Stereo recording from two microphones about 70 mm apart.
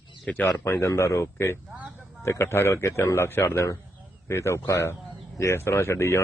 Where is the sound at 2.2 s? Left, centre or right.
Left.